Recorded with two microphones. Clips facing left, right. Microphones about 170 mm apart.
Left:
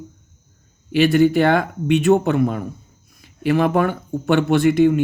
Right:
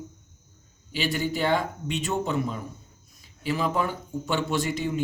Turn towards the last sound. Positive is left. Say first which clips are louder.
# left 13 dB
turn(degrees=65)  # may be behind; listen again after turning